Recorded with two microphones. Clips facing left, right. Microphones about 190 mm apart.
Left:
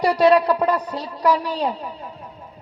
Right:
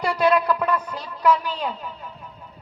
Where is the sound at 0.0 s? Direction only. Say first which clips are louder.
Left 5 dB; 35° left (ahead or behind).